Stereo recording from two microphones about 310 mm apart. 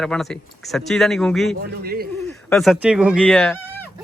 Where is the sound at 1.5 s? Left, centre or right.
Right.